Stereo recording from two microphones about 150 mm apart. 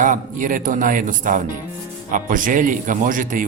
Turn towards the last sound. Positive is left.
turn(degrees=-65)  # may be behind; listen again after turning